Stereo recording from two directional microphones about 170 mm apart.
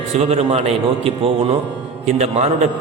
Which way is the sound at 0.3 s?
40° right (ahead or behind).